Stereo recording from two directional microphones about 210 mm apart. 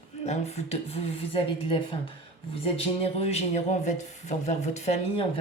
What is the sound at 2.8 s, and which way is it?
Speech, 30° left (ahead or behind).